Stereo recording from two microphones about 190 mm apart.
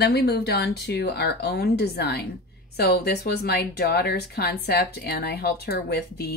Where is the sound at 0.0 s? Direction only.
55° left (ahead or behind).